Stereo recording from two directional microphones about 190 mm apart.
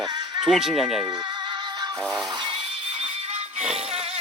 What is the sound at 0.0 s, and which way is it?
Music, 20° right (ahead or behind).